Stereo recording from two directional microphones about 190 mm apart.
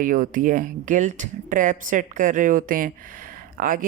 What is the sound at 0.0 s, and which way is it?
Speech, 45° right (ahead or behind).